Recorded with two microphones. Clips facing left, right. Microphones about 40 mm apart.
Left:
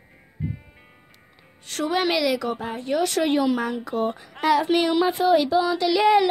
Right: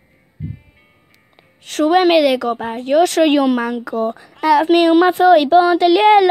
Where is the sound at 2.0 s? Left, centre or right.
Right.